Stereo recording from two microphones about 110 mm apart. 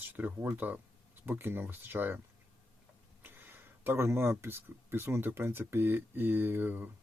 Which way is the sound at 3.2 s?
20° right (ahead or behind).